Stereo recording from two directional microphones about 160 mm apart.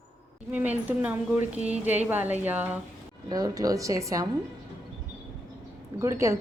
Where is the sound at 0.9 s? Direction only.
10° right (ahead or behind).